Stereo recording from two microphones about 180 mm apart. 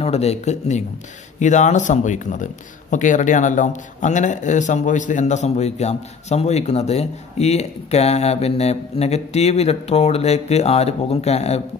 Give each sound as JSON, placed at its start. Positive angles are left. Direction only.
{"t": 0.0, "sound": "speech", "side_deg": 35}